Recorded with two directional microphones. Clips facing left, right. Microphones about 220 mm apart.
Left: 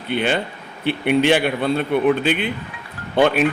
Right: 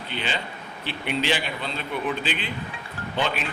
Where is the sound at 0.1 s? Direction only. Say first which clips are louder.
Left 11 dB; 55° left (ahead or behind).